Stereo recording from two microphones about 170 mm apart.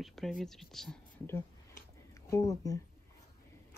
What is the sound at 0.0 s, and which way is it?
Speech, centre (ahead or behind).